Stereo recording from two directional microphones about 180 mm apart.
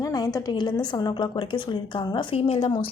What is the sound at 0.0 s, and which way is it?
A woman's voice, 20° left (ahead or behind).